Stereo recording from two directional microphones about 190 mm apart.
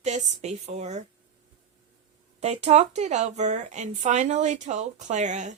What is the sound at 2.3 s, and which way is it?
A woman's voice, 35° right (ahead or behind).